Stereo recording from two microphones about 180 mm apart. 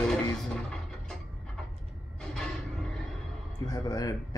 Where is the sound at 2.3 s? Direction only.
5° left (ahead or behind).